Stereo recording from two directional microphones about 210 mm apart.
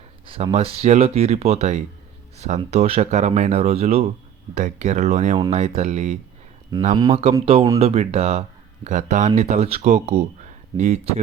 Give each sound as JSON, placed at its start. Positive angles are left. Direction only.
{"t": 0.3, "sound": "speech", "side_deg": -25}